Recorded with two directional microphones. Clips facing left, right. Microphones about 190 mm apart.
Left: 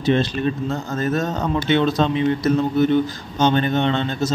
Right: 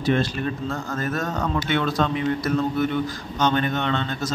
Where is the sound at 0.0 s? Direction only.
20° left (ahead or behind).